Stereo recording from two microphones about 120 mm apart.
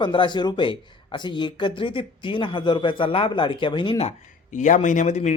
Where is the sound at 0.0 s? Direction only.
40° left (ahead or behind).